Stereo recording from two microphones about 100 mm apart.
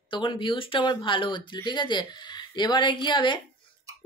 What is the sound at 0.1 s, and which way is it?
Speech, 55° left (ahead or behind).